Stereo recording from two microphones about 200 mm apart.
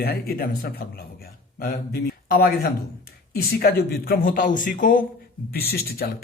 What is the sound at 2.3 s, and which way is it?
A man's voice, 50° left (ahead or behind).